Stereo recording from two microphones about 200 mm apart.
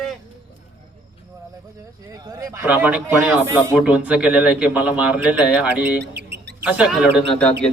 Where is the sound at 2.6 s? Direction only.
5° right (ahead or behind).